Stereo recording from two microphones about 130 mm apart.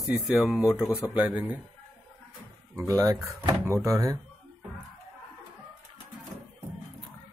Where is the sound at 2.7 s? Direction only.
25° right (ahead or behind).